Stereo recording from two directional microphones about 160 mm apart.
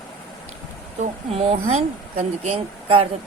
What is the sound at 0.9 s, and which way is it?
Speech, 45° right (ahead or behind).